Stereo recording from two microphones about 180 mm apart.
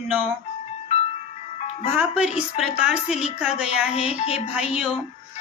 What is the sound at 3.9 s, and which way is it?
Speech, 35° left (ahead or behind).